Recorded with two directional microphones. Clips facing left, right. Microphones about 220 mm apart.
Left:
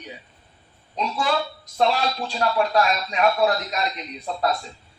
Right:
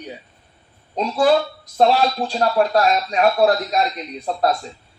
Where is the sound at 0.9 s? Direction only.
45° right (ahead or behind).